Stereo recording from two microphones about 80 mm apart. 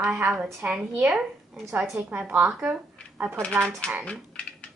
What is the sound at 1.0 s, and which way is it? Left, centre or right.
A woman's voice, centre.